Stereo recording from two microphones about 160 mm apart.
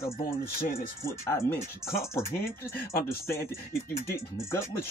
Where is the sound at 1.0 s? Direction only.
15° left (ahead or behind).